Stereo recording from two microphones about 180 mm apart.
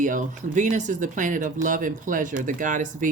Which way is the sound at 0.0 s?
45° right (ahead or behind).